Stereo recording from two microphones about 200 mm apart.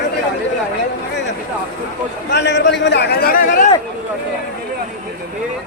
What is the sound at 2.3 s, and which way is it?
A man's voice, 60° left (ahead or behind).